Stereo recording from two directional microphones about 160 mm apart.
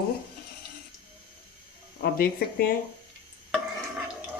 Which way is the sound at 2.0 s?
70° left (ahead or behind).